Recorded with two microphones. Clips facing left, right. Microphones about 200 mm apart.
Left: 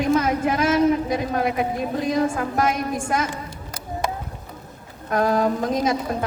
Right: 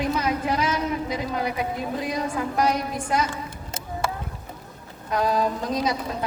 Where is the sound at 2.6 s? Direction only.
50° left (ahead or behind).